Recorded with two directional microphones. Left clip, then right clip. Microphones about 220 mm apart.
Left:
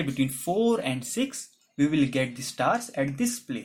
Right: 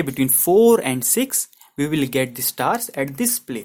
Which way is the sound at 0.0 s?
40° right (ahead or behind).